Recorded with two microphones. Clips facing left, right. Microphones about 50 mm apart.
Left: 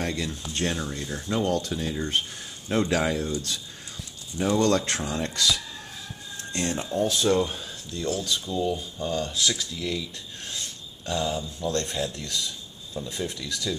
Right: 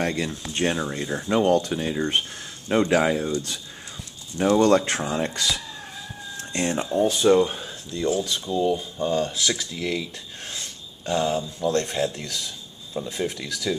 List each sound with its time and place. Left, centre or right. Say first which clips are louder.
0.0 s speech: right 4 dB; right
4.4 s speech: right 5 dB; centre
8.9 s speech: right 5 dB; right; by 13.7 s centre